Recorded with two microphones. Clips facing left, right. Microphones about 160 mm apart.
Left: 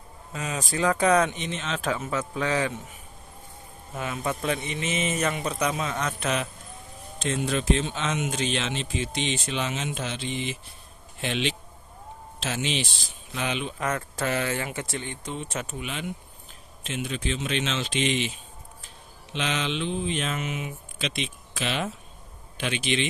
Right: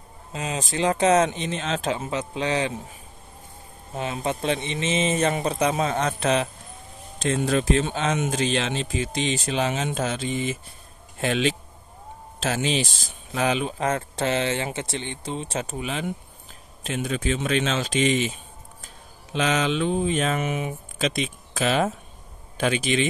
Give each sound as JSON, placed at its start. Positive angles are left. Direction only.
{"t": 0.3, "sound": "a man's voice", "side_deg": -25}
{"t": 3.9, "sound": "a man's voice", "side_deg": -25}
{"t": 19.3, "sound": "speech", "side_deg": -40}